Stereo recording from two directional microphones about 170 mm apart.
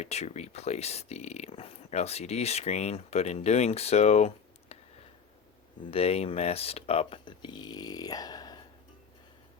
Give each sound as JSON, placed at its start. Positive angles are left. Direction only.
{"t": 0.0, "sound": "speech", "side_deg": 40}
{"t": 4.7, "sound": "a sound", "side_deg": 35}
{"t": 5.9, "sound": "speech", "side_deg": 35}